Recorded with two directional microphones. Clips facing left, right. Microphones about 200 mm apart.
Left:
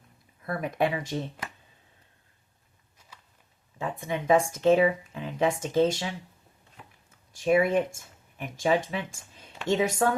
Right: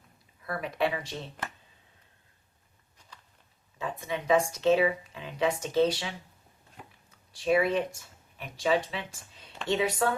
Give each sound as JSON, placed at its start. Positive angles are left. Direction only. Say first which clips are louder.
{"t": 0.4, "sound": "speech", "louder": "left 3 dB", "side_deg": 45}
{"t": 4.0, "sound": "speech", "louder": "left 2 dB", "side_deg": 50}
{"t": 7.3, "sound": "speech", "louder": "left 3 dB", "side_deg": 50}